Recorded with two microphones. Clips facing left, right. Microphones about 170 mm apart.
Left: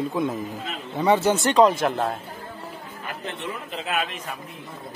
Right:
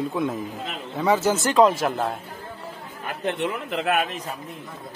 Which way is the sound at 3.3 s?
65° right (ahead or behind).